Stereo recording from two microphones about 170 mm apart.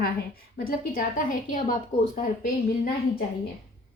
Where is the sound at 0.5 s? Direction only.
55° left (ahead or behind).